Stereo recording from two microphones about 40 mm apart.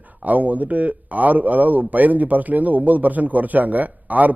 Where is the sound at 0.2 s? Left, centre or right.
Right.